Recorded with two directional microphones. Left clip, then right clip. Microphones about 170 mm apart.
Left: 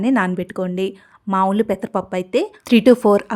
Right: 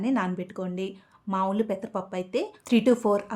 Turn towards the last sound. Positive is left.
turn(degrees=40)  # may be behind; listen again after turning